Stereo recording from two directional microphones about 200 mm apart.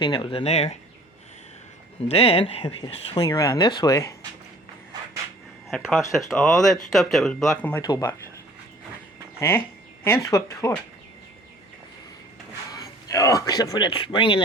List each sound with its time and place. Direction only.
0.0 s speech: 25° left (ahead or behind)
2.0 s speech: 30° left (ahead or behind)
3.2 s speech: 15° left (ahead or behind)
5.7 s speech: centre (ahead or behind)
7.8 s speech: 20° left (ahead or behind)
9.4 s speech: 10° left (ahead or behind)
12.7 s speech: 20° left (ahead or behind)